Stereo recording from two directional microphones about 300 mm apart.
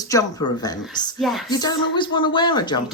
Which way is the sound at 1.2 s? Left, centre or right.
Centre.